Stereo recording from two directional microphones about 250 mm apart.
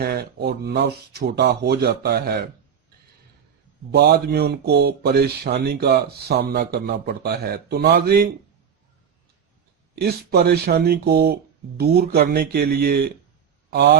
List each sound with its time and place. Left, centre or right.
0.0 s speech: right
3.9 s speech: right
9.9 s speech: right